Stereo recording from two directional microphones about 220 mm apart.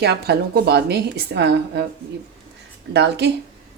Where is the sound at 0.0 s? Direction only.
50° right (ahead or behind).